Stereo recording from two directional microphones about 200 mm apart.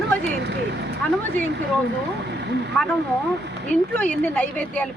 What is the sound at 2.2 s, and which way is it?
Speech, 55° right (ahead or behind).